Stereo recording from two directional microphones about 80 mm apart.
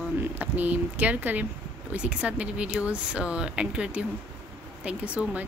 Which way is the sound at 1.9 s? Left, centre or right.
Centre.